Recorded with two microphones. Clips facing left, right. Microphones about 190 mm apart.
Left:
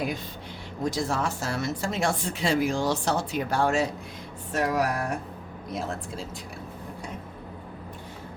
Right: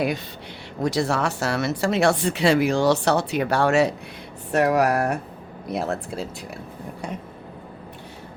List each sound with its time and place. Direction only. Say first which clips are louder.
0.8 s speech: right 5 dB; 75° right (ahead or behind)